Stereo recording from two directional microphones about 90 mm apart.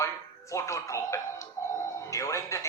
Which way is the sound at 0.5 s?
35° left (ahead or behind).